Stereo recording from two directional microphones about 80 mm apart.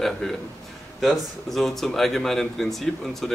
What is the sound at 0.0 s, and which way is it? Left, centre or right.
Speech, centre.